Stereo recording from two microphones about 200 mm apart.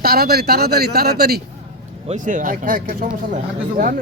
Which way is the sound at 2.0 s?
40° right (ahead or behind).